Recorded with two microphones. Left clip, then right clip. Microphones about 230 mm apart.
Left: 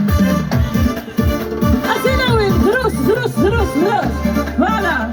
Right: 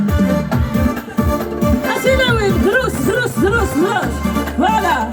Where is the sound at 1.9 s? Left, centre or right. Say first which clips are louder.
Right 2 dB; centre.